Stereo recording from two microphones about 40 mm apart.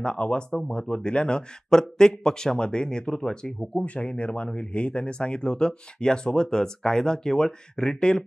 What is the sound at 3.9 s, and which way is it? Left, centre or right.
Speech, left.